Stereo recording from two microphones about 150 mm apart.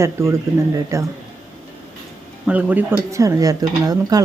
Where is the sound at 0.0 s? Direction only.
20° right (ahead or behind).